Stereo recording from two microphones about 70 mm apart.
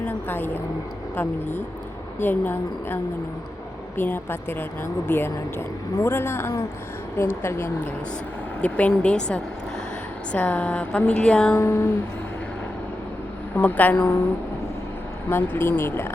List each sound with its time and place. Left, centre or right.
0.0 s a woman's voice: left
8.6 s speech: centre
11.5 s speech: left
13.6 s a woman's voice: left
15.3 s speech: left